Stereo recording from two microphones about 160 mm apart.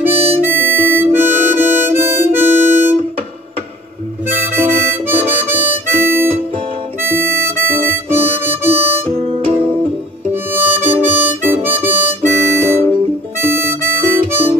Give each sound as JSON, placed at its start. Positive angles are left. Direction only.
{"t": 0.0, "sound": "harmonica", "side_deg": -15}
{"t": 4.4, "sound": "harmonica", "side_deg": -15}
{"t": 10.3, "sound": "harmonica", "side_deg": -10}